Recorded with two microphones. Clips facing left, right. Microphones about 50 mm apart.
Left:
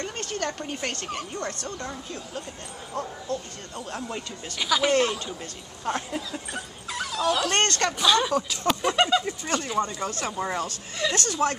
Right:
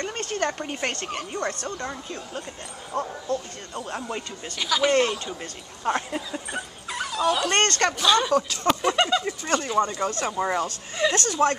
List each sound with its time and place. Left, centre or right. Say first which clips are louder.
0.2 s speech: right 4 dB; right
2.9 s speech: right 4 dB; right
3.7 s speech: right 2 dB; centre
4.6 s speech: right 1 dB; centre
5.4 s speech: right 3 dB; centre
8.6 s a sound: left 1 dB; centre
9.4 s speech: right 3 dB; centre
10.2 s speech: right 3 dB; centre